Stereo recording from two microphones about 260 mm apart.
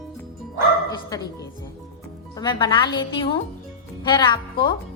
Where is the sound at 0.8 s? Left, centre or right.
Centre.